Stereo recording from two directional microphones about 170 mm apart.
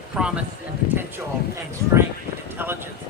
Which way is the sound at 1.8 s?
20° left (ahead or behind).